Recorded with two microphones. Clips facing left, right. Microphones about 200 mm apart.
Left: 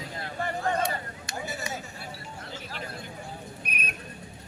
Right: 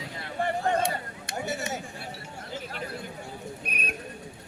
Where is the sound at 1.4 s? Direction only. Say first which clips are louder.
Right 4 dB; 70° right (ahead or behind).